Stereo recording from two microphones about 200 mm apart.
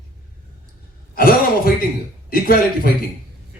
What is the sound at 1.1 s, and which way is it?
Speech, 50° left (ahead or behind).